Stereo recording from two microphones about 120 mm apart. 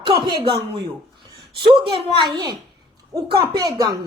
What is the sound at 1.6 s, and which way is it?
Speech, 45° right (ahead or behind).